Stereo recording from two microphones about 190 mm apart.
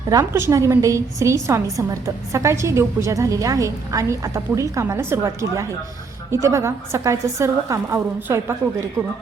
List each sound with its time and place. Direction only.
0.1 s a woman's voice: 15° right (ahead or behind)